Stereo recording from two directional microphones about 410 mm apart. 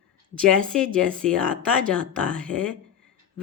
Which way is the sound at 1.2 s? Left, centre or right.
Centre.